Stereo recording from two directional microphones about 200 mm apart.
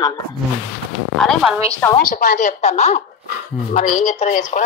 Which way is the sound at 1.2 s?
Centre (ahead or behind).